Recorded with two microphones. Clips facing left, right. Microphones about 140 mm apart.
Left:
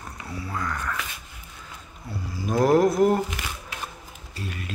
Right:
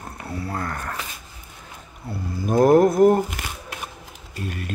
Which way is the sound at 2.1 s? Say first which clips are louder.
Right 4 dB; 60° right (ahead or behind).